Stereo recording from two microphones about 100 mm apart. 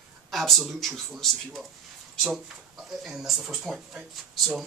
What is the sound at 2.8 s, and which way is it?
Speech, centre (ahead or behind).